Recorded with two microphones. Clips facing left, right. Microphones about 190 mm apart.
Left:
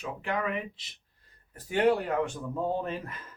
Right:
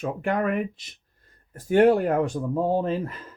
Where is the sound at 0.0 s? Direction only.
45° right (ahead or behind); by 3.2 s 30° right (ahead or behind).